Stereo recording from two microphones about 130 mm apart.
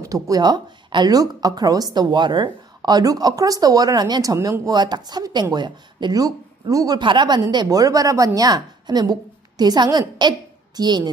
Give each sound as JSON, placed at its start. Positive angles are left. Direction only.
{"t": 0.0, "sound": "a woman's voice", "side_deg": -25}